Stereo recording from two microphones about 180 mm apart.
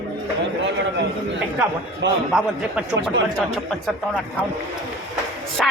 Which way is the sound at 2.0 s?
80° right.